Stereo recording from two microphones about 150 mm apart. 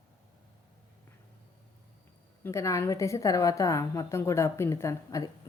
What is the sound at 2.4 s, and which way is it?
A woman's voice, 20° left (ahead or behind).